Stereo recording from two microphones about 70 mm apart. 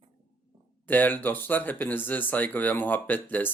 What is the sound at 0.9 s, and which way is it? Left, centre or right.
Speech, left.